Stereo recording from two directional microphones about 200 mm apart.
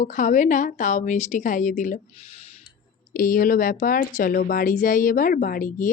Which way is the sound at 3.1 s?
45° left (ahead or behind).